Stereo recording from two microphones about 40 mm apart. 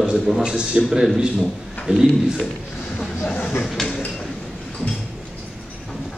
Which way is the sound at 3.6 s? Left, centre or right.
Centre.